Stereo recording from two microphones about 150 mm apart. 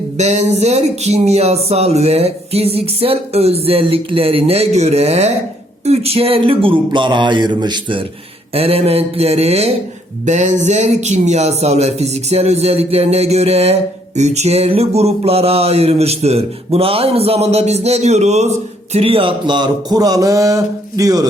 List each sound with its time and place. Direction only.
0.2 s speech: 50° right (ahead or behind)
5.8 s a sound: 45° right (ahead or behind)
8.5 s speech: 40° right (ahead or behind); by 21.2 s 25° right (ahead or behind)